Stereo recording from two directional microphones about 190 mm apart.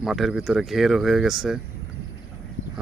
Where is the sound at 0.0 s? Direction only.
Centre (ahead or behind).